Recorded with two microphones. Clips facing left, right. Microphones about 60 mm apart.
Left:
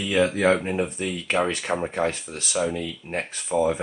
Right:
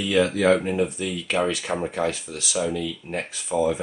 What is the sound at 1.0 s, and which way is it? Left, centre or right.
Speech, left.